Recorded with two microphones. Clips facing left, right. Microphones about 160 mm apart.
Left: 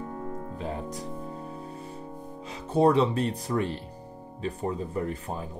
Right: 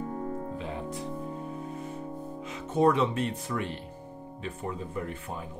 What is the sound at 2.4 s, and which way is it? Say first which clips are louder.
Speech: left 2 dB; 35° left (ahead or behind).